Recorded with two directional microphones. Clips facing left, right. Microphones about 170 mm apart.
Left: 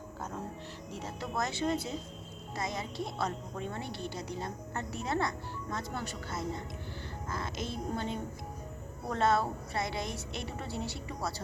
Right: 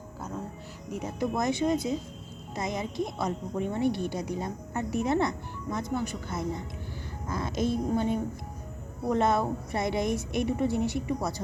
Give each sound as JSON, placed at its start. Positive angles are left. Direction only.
{"t": 0.9, "sound": "a woman's voice", "side_deg": -15}